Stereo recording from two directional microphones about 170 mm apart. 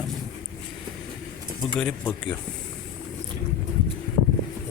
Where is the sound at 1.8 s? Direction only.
10° left (ahead or behind).